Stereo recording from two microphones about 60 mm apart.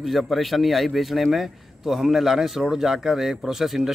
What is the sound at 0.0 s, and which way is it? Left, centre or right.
A man's voice, centre.